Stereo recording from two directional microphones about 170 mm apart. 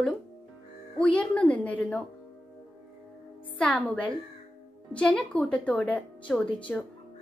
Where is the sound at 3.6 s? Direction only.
10° left (ahead or behind).